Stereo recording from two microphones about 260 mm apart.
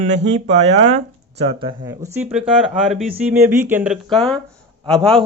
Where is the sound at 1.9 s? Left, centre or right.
Centre.